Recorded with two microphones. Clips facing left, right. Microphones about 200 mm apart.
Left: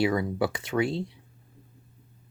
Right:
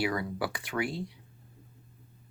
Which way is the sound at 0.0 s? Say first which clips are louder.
Left 6 dB; 25° left (ahead or behind).